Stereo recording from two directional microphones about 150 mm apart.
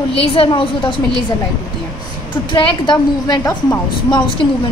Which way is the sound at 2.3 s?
35° left (ahead or behind).